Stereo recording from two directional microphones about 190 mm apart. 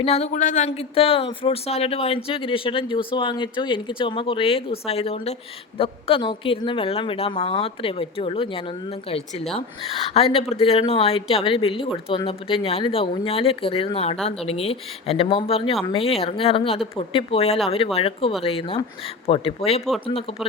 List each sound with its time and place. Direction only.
0.0 s speech: 35° left (ahead or behind)